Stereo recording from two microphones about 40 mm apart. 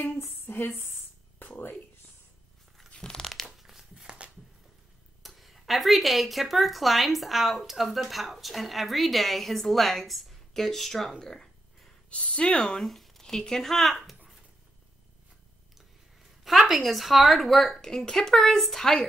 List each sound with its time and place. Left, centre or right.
0.2 s a sound: left
1.4 s speech: left
3.0 s tearing: centre
3.4 s a sound: centre
3.9 s a sound: centre
5.2 s speech: centre
12.1 s speech: left
12.7 s speech: centre
16.4 s speech: centre